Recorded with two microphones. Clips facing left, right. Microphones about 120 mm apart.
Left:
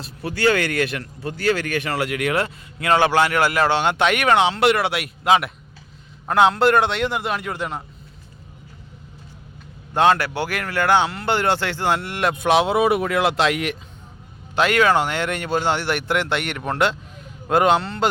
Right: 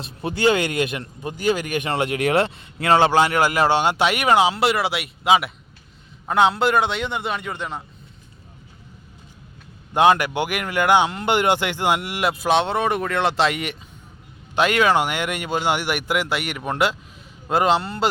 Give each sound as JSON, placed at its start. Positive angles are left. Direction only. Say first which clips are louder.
{"t": 0.0, "sound": "a man's voice", "louder": "right 1 dB", "side_deg": -20}
{"t": 9.9, "sound": "speech", "louder": "right 1 dB", "side_deg": -15}
{"t": 14.5, "sound": "a man's voice", "louder": "left 1 dB", "side_deg": -20}